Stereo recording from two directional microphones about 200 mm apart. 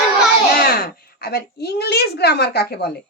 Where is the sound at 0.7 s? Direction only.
50° left (ahead or behind).